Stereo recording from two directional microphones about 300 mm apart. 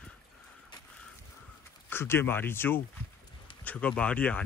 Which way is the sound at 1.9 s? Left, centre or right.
Centre.